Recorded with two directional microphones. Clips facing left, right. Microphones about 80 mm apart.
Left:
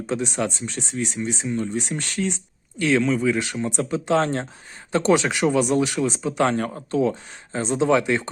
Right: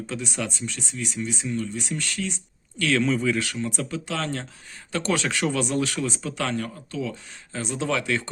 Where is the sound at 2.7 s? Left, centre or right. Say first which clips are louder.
Left 3 dB; left.